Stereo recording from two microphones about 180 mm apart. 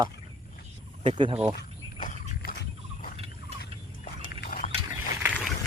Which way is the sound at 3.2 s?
35° right (ahead or behind).